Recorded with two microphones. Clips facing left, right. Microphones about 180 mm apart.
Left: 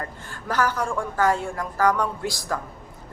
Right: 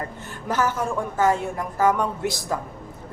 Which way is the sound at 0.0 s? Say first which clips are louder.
Right 2 dB; 20° right (ahead or behind).